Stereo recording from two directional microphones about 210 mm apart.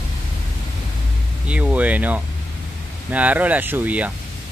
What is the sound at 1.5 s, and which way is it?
Music, 5° right (ahead or behind).